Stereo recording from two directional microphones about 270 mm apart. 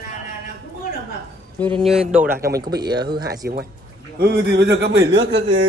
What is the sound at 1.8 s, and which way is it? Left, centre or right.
Speech, centre.